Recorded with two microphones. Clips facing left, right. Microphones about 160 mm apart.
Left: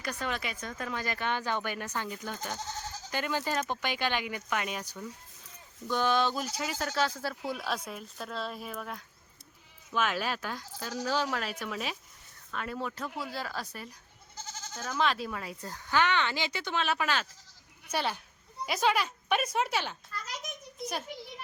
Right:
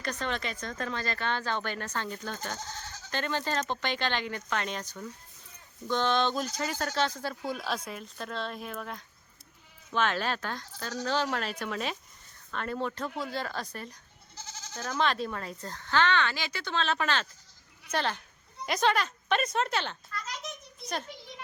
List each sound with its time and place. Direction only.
0.0 s speech: 10° left (ahead or behind)
14.3 s goat: 50° left (ahead or behind)
14.8 s speech: 5° left (ahead or behind)